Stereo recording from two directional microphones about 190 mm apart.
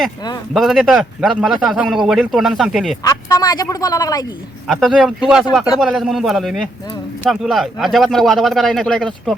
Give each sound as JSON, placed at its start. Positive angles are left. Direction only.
{"t": 0.5, "sound": "speech", "side_deg": 0}
{"t": 3.0, "sound": "speech", "side_deg": 20}
{"t": 4.6, "sound": "speech", "side_deg": 0}